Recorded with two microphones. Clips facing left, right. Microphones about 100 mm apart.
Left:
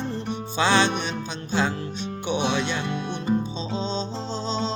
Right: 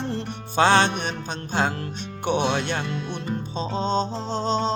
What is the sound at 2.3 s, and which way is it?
Music, 50° right (ahead or behind).